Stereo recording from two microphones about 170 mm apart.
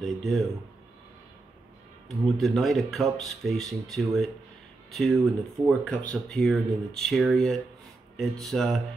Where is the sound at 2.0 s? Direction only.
Centre (ahead or behind).